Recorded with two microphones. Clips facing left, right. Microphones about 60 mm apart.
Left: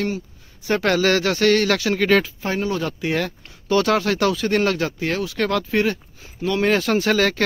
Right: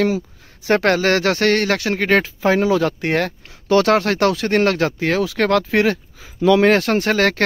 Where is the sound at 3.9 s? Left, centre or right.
Right.